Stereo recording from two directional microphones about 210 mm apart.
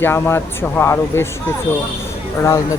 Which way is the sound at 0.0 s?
10° left (ahead or behind).